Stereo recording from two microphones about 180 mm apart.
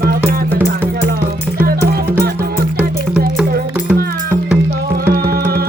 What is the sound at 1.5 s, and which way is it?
Music, 55° right (ahead or behind).